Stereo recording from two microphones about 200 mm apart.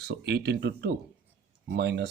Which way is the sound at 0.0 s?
55° right (ahead or behind).